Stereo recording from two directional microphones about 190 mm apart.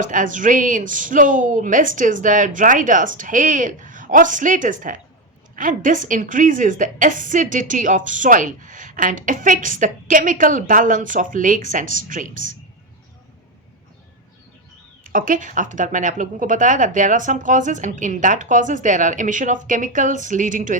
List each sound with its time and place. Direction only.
0.0 s a woman's voice: 45° right (ahead or behind)
15.0 s a woman's voice: 45° right (ahead or behind)